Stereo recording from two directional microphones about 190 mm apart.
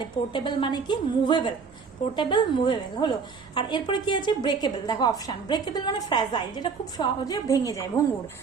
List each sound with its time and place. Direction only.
0.3 s a woman's voice: 25° left (ahead or behind)